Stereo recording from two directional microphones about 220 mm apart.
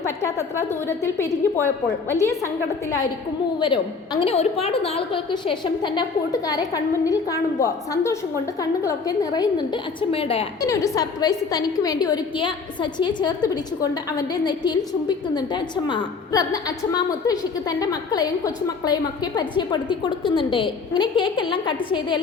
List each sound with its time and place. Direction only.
0.0 s a woman's voice: 10° left (ahead or behind)
3.6 s a woman's voice: 20° left (ahead or behind)
10.7 s a woman's voice: 15° left (ahead or behind)